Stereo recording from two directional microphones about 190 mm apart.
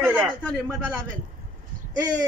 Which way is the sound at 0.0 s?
10° right (ahead or behind).